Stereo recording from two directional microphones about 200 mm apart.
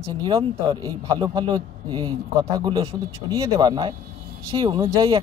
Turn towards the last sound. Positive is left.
turn(degrees=-25)  # may be behind; listen again after turning